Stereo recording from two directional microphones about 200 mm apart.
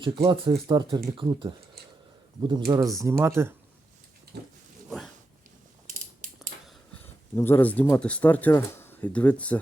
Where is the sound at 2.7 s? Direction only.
15° right (ahead or behind).